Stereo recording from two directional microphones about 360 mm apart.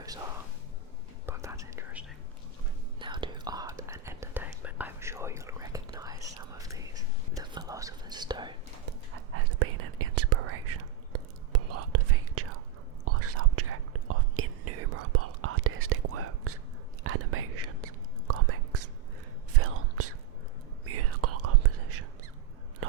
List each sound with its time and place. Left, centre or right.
1.3 s whispering: centre
9.6 s whispering: right
22.8 s biting: right